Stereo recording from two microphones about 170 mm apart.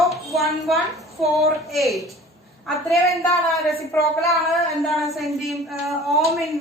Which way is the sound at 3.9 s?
10° left (ahead or behind).